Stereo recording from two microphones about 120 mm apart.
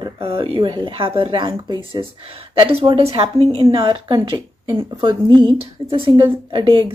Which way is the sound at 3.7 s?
45° right (ahead or behind).